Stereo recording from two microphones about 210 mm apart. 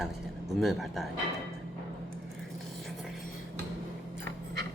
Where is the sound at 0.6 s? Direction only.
Centre (ahead or behind).